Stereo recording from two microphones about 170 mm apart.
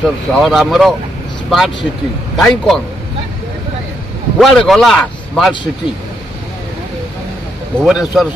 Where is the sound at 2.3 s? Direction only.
Centre (ahead or behind).